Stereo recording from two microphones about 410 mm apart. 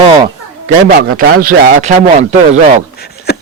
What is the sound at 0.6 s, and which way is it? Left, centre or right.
A man's voice, centre.